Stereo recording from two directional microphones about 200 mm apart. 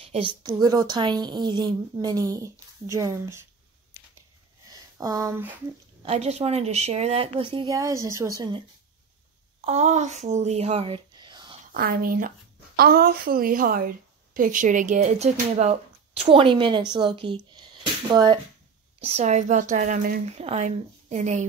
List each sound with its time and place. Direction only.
0.0 s a sound: 30° right (ahead or behind)
0.4 s a woman's voice: 20° right (ahead or behind)
4.6 s a sound: 15° right (ahead or behind)
6.0 s a woman's voice: 35° right (ahead or behind)
7.7 s a woman's voice: 15° right (ahead or behind)
9.7 s speech: 35° right (ahead or behind)
11.7 s a woman's voice: 45° right (ahead or behind); by 18.4 s 20° right (ahead or behind)
18.9 s a woman's voice: 30° right (ahead or behind)